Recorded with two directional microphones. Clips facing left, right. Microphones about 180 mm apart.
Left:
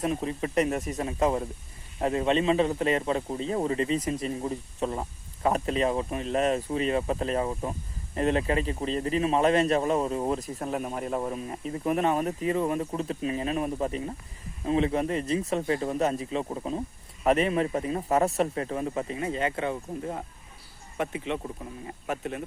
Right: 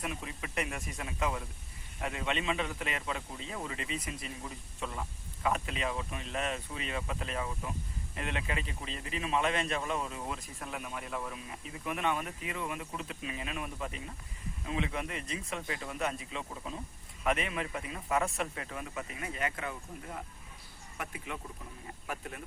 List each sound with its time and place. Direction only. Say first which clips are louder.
0.0 s a man's voice: left 11 dB; 35° left (ahead or behind)